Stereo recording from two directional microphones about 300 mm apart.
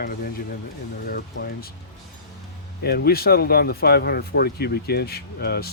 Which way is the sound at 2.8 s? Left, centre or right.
Left.